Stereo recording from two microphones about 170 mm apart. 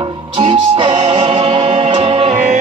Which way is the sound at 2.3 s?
50° right (ahead or behind).